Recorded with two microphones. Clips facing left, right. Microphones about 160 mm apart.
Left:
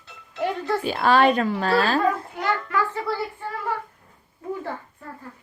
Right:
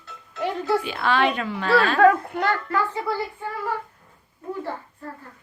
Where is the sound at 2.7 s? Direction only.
30° right (ahead or behind).